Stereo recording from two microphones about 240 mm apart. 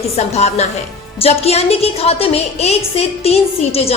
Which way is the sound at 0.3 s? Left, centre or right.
Left.